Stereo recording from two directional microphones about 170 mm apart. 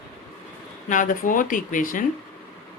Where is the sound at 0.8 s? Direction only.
50° left (ahead or behind).